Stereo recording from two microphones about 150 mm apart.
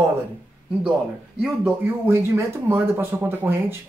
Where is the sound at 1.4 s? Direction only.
10° right (ahead or behind).